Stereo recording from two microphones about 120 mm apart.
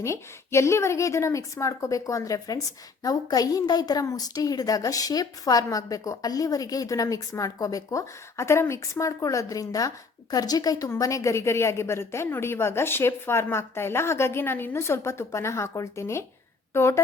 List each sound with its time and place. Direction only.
0.0 s a woman's voice: 25° left (ahead or behind)